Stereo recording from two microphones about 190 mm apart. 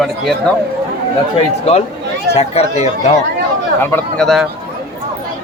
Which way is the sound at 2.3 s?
35° left (ahead or behind).